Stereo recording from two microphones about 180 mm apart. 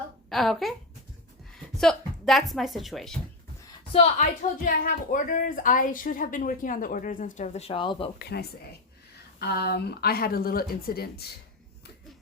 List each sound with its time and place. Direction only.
0.3 s a woman's voice: centre (ahead or behind)
1.8 s a woman's voice: centre (ahead or behind)
3.9 s a woman's voice: 40° left (ahead or behind)
8.2 s speech: 60° left (ahead or behind)